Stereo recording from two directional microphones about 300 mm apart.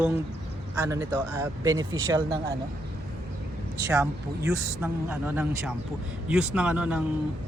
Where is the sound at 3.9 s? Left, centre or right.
Centre.